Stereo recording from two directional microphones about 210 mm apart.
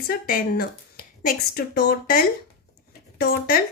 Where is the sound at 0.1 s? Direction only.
45° left (ahead or behind).